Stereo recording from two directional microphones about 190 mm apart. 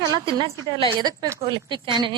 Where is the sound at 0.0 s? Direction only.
20° right (ahead or behind).